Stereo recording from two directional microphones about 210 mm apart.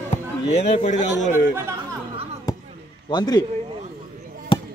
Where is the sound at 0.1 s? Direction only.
30° left (ahead or behind).